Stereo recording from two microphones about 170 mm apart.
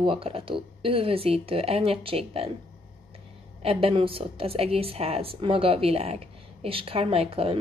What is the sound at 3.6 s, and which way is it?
A woman's voice, 35° right (ahead or behind).